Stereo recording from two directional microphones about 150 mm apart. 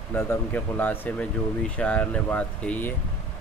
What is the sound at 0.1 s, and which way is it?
Speech, 15° left (ahead or behind).